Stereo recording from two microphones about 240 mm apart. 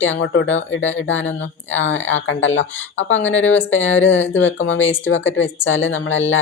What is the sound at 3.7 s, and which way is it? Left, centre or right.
Speech, left.